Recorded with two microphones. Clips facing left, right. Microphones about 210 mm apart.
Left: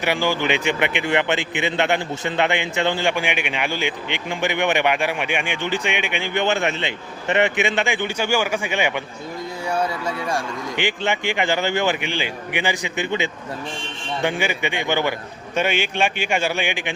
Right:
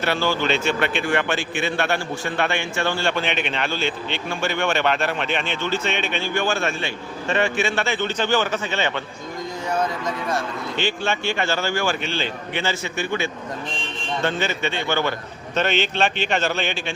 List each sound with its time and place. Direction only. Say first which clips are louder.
0.0 s a man's voice: left 1 dB; 15° left (ahead or behind)